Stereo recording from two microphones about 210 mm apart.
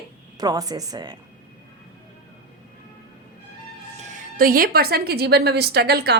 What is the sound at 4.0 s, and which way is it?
A woman's voice, 35° right (ahead or behind).